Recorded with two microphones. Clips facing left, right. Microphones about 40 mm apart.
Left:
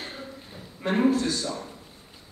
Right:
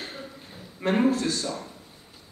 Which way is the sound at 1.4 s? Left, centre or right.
Centre.